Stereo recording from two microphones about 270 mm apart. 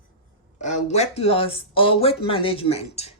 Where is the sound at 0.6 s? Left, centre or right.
Left.